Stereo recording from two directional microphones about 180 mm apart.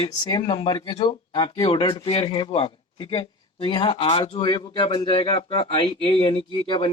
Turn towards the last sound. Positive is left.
turn(degrees=30)  # may be behind; listen again after turning